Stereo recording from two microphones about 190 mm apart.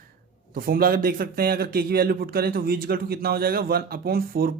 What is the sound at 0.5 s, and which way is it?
A man's voice, 50° right (ahead or behind).